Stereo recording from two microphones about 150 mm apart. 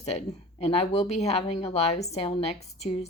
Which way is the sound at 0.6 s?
45° left (ahead or behind).